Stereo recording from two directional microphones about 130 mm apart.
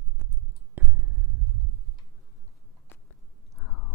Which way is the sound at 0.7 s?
15° right (ahead or behind).